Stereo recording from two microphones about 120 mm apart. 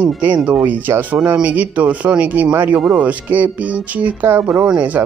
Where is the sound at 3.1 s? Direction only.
15° right (ahead or behind).